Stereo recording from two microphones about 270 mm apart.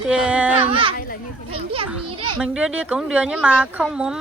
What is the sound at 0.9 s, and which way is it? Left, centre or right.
Speech, left.